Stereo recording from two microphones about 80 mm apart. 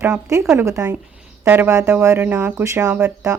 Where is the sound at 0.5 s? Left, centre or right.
Right.